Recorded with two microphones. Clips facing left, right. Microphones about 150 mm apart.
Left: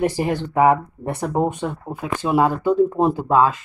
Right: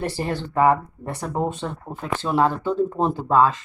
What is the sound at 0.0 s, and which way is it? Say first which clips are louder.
Speech: left 5 dB; 15° left (ahead or behind).